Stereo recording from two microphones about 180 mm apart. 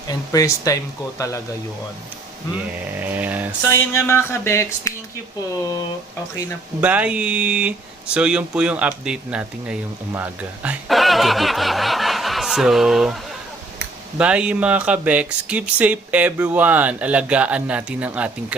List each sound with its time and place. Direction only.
0.1 s speech: 20° left (ahead or behind)
2.7 s speech: 10° right (ahead or behind)
3.7 s speech: 15° left (ahead or behind)
6.8 s speech: 10° right (ahead or behind)
14.2 s speech: 5° right (ahead or behind)